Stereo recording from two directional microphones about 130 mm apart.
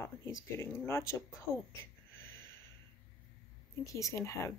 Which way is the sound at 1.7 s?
20° left (ahead or behind).